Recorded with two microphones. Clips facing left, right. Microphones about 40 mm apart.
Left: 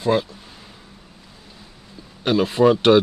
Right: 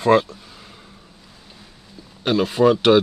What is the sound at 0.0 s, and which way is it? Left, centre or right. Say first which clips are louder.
Speech: right 4 dB; right.